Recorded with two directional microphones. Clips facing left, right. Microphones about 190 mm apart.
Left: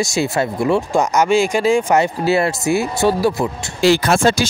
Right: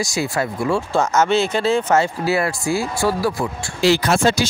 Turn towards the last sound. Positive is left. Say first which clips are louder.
# left 2 dB
turn(degrees=50)  # may be behind; listen again after turning